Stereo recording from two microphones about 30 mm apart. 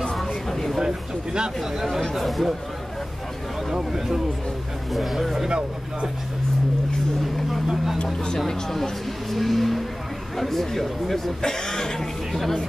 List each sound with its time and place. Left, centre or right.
0.5 s a sound: centre
2.1 s speech: centre
4.9 s speech: centre
7.7 s speech: centre
8.0 s speech: left
8.5 s speech: centre